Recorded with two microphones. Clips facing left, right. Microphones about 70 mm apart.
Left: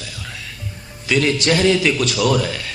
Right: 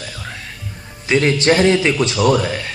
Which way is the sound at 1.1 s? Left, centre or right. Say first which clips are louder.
Right 3 dB; right.